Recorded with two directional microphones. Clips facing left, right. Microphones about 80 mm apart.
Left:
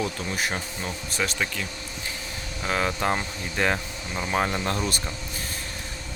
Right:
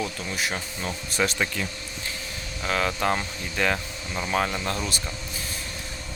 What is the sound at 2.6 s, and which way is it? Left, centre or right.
Speech, centre.